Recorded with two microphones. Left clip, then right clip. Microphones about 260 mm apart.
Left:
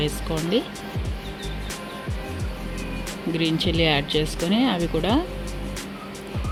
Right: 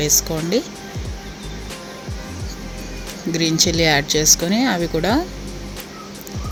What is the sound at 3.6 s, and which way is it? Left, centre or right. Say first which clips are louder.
Speech: right 6 dB; centre.